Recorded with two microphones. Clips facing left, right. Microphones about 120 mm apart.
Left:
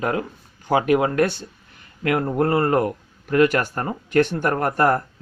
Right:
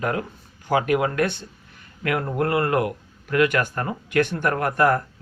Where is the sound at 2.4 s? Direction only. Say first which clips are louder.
Left 2 dB; 35° left (ahead or behind).